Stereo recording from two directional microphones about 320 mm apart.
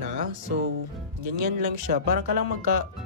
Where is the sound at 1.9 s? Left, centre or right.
Right.